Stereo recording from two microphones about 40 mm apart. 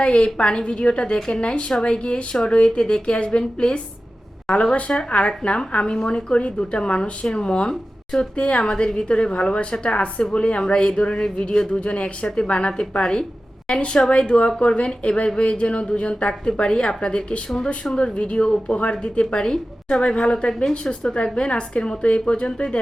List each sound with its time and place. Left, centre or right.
0.0 s a woman's voice: left
7.7 s a woman's voice: centre
8.4 s a woman's voice: left
20.7 s a woman's voice: centre